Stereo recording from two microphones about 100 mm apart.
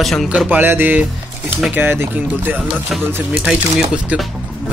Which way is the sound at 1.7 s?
20° right (ahead or behind).